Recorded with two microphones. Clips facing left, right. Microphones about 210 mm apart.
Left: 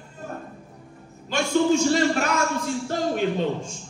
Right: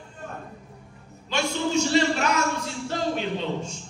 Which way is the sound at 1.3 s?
50° left (ahead or behind).